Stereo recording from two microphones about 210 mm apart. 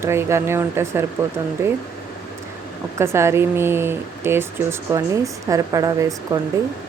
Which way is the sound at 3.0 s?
10° right (ahead or behind).